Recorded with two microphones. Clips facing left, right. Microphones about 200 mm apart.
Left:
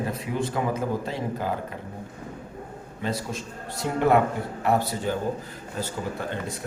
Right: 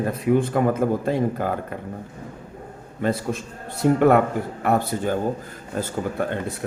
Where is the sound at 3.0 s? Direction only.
55° right (ahead or behind).